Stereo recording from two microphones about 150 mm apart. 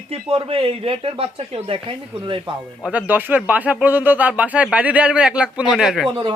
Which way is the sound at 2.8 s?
10° right (ahead or behind).